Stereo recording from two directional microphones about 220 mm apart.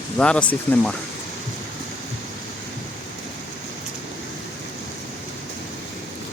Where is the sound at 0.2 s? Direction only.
5° left (ahead or behind).